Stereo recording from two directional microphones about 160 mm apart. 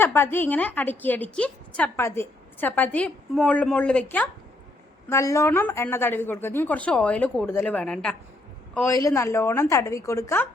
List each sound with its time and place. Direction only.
0.0 s a woman's voice: 15° left (ahead or behind)
9.0 s a woman's voice: 15° left (ahead or behind)